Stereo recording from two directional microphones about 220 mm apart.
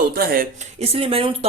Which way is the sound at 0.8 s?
25° right (ahead or behind).